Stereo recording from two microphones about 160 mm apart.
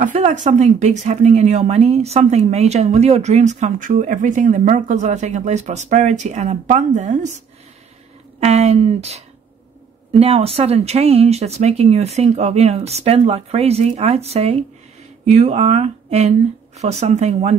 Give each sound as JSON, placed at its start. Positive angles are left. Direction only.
{"t": 0.1, "sound": "speech", "side_deg": -45}
{"t": 8.5, "sound": "speech", "side_deg": -40}